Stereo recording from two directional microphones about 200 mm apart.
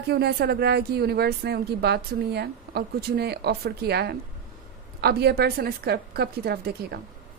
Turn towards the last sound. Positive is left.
turn(degrees=-50)  # may be behind; listen again after turning